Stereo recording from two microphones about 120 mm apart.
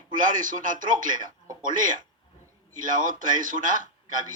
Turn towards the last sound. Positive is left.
turn(degrees=-90)